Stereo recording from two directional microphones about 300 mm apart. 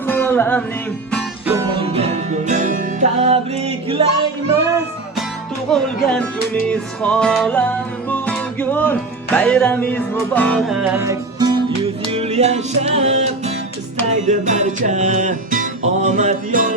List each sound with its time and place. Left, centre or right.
0.1 s music: centre
1.1 s music: centre
5.7 s music: centre; by 16.7 s right